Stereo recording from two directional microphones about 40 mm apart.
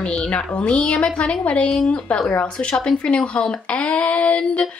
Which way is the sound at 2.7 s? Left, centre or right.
Left.